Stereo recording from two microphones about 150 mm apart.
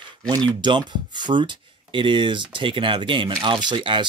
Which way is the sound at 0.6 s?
30° right (ahead or behind).